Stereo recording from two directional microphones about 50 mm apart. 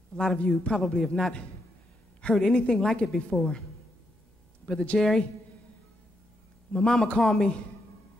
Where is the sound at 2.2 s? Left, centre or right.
Centre.